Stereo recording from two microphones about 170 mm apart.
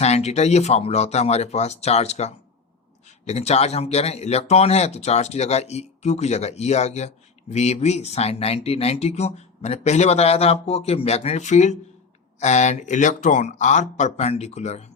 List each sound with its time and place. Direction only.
0.0 s speech: 40° left (ahead or behind)